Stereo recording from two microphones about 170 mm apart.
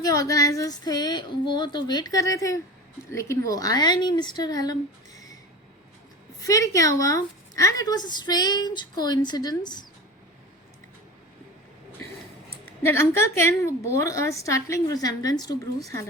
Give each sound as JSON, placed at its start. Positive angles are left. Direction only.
{"t": 0.0, "sound": "a woman's voice", "side_deg": 20}
{"t": 6.4, "sound": "a woman's voice", "side_deg": 20}
{"t": 12.8, "sound": "a woman's voice", "side_deg": 15}